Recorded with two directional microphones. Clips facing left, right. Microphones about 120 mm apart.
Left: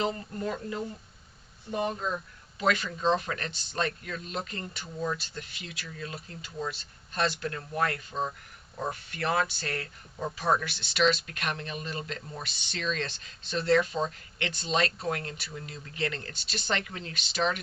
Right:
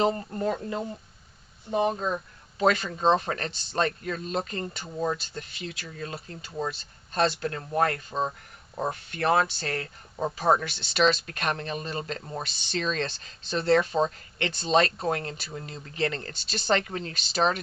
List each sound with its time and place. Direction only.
0.0 s speech: 40° right (ahead or behind)
1.7 s speech: 20° right (ahead or behind)
2.6 s speech: 35° right (ahead or behind)